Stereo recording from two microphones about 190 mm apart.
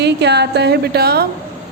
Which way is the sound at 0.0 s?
60° right (ahead or behind).